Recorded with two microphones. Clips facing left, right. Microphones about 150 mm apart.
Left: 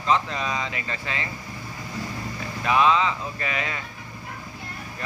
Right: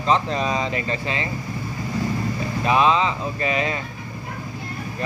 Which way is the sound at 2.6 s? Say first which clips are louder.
Right 2 dB; 25° right (ahead or behind).